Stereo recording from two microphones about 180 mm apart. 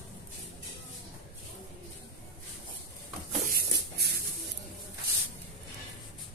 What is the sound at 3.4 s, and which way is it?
Shuffle, 60° right (ahead or behind).